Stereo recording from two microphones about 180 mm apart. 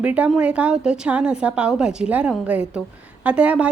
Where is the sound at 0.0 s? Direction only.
5° right (ahead or behind).